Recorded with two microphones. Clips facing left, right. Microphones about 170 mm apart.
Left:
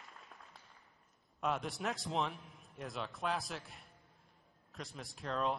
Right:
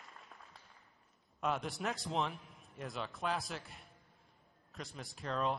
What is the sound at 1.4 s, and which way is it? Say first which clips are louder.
A man's voice: even; centre (ahead or behind).